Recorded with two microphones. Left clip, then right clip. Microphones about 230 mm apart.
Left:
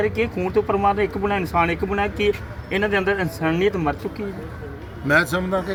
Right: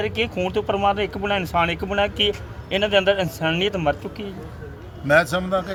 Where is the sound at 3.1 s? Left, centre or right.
Centre.